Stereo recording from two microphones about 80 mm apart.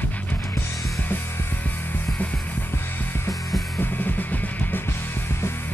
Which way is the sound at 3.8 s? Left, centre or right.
Left.